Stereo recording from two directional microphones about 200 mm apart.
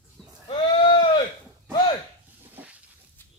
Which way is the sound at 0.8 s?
25° left (ahead or behind).